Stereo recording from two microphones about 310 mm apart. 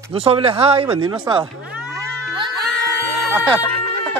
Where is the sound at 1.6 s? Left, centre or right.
Centre.